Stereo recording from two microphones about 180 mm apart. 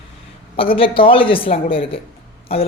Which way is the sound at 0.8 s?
30° left (ahead or behind).